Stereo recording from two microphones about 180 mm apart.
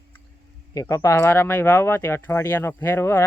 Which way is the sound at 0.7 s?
20° left (ahead or behind).